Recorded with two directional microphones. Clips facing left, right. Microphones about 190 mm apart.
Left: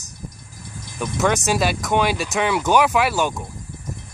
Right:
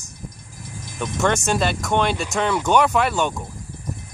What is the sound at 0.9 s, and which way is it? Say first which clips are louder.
Speech: left 1 dB; centre (ahead or behind).